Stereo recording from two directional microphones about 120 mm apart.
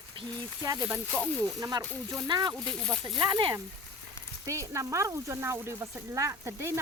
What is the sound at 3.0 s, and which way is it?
Speech, 40° right (ahead or behind).